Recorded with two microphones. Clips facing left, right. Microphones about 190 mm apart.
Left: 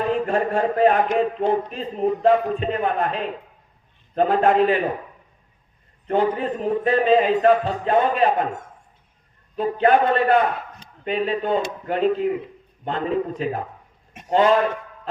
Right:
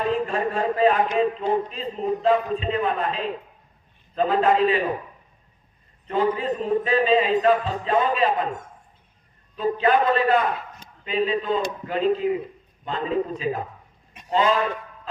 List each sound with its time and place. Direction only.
0.3 s speech: 55° left (ahead or behind)
6.1 s speech: 55° left (ahead or behind)
9.6 s a man's voice: 60° left (ahead or behind)